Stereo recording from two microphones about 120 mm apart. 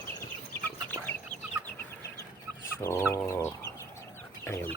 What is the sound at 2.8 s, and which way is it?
Chicken, 20° left (ahead or behind).